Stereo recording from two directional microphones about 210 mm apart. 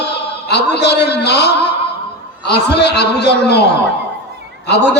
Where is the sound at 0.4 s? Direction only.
50° left (ahead or behind).